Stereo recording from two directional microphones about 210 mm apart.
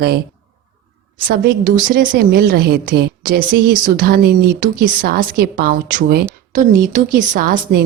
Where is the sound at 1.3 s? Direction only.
40° right (ahead or behind).